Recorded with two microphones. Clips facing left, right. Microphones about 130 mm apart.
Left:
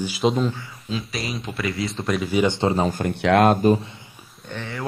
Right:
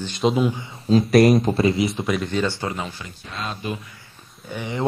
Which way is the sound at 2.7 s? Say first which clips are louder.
Left 10 dB; 45° left (ahead or behind).